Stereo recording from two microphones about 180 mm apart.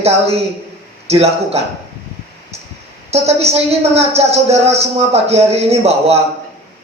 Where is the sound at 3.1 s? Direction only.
35° right (ahead or behind).